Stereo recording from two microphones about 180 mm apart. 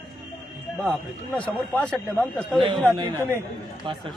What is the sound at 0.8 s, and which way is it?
A man's voice, 5° left (ahead or behind).